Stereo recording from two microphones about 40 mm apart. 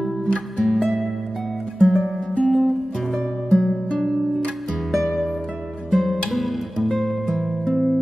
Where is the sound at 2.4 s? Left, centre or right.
Left.